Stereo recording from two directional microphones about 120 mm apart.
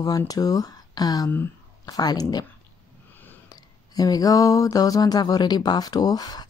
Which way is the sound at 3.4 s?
30° left (ahead or behind).